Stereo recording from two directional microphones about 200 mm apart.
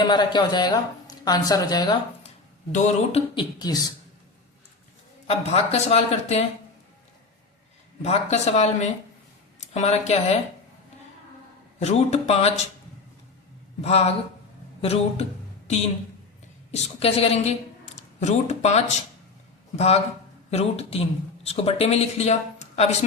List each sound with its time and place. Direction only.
0.0 s a woman's voice: 20° left (ahead or behind)
2.7 s a woman's voice: 35° left (ahead or behind)
5.5 s speech: 30° left (ahead or behind)
8.0 s speech: 30° left (ahead or behind)
11.8 s speech: 35° left (ahead or behind)
13.8 s a woman's voice: 30° left (ahead or behind)